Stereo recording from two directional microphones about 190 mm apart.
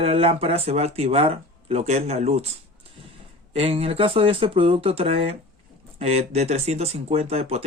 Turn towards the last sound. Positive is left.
turn(degrees=-35)  # may be behind; listen again after turning